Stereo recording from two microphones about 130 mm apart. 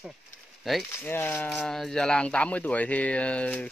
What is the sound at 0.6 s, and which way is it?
Speech, centre (ahead or behind).